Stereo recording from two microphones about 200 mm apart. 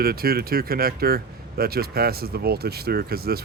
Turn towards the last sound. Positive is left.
turn(degrees=-50)  # may be behind; listen again after turning